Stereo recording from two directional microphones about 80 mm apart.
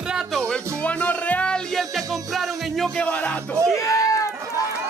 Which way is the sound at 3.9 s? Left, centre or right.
Left.